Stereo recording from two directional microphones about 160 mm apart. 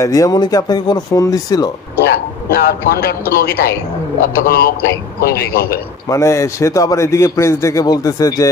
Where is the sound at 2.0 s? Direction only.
75° left (ahead or behind).